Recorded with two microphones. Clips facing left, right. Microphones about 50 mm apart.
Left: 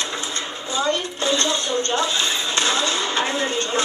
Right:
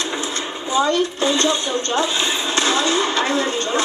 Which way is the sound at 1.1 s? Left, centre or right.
Right.